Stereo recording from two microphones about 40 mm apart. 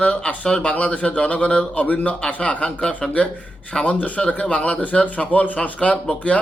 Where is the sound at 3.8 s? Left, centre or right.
Left.